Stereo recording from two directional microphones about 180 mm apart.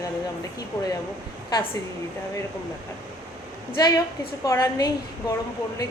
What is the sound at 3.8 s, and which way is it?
A woman's voice, 20° left (ahead or behind).